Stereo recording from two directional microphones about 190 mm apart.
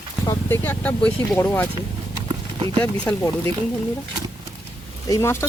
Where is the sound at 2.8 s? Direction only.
10° left (ahead or behind).